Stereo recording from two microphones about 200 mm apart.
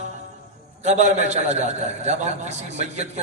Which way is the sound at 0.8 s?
35° right (ahead or behind).